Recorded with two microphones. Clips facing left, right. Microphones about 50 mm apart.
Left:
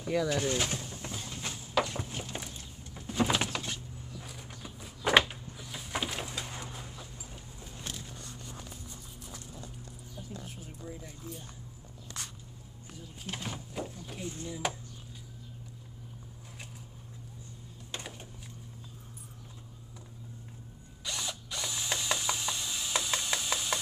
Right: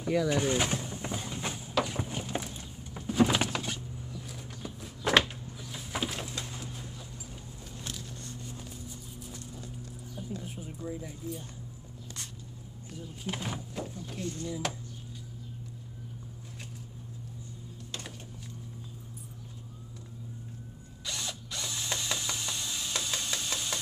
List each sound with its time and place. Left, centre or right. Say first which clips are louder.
0.0 s speech: right 2 dB; centre
0.3 s a sound: right 3 dB; centre
4.3 s a sound: right 4 dB; centre
5.3 s bird: right 1 dB; centre
10.4 s a sound: right 5 dB; centre
13.2 s speech: right 3 dB; centre
13.7 s speech: right 1 dB; centre
21.0 s ratchet: even; centre
22.9 s wood: left 4 dB; centre